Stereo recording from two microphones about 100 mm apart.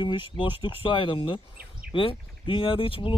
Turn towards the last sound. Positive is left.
turn(degrees=65)  # may be behind; listen again after turning